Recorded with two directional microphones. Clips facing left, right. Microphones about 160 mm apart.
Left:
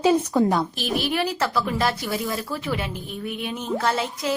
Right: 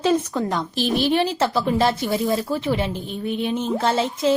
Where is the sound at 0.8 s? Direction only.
30° right (ahead or behind).